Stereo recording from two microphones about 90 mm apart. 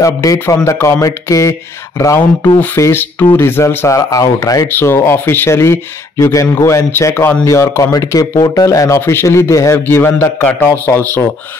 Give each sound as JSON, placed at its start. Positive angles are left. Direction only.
{"t": 0.0, "sound": "speech", "side_deg": 40}
{"t": 4.6, "sound": "speech", "side_deg": 25}
{"t": 9.8, "sound": "speech", "side_deg": 25}